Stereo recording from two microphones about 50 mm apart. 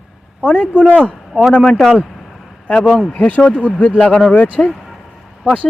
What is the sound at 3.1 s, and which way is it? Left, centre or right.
Speech, left.